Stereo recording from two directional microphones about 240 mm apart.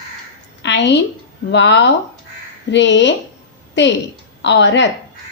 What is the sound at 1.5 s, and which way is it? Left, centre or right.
A woman's voice, left.